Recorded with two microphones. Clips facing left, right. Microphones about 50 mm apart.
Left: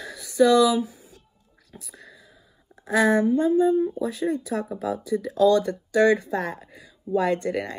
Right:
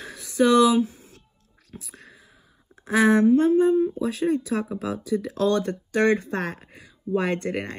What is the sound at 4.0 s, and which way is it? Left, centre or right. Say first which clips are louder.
Speech: right 2 dB; right.